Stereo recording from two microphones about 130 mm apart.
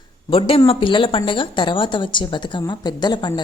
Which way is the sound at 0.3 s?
45° left (ahead or behind).